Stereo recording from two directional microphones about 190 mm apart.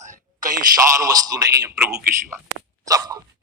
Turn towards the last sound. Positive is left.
turn(degrees=-20)  # may be behind; listen again after turning